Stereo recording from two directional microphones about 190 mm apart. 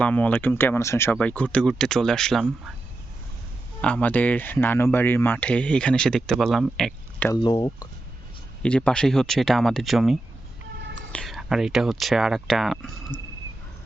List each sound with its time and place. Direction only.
0.0 s speech: 10° left (ahead or behind)
3.8 s speech: 5° left (ahead or behind)
7.3 s speech: 25° left (ahead or behind)
8.6 s speech: 5° left (ahead or behind)